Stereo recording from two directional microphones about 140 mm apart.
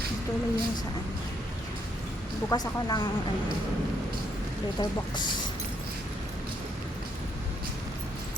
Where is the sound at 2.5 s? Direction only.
30° left (ahead or behind).